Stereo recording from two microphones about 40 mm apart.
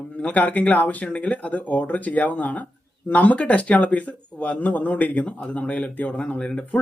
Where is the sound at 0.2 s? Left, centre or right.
Left.